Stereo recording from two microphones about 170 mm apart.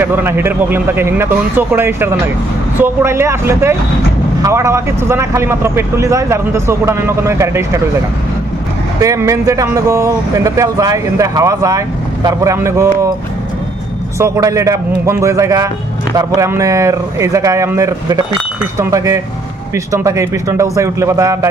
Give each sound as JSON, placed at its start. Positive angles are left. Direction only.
{"t": 0.0, "sound": "speech", "side_deg": -15}
{"t": 9.0, "sound": "speech", "side_deg": -20}
{"t": 14.1, "sound": "speech", "side_deg": -15}